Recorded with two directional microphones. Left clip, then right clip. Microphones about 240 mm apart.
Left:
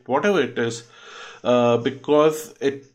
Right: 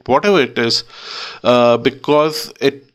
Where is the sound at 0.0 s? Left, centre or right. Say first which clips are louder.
Right 7 dB; right.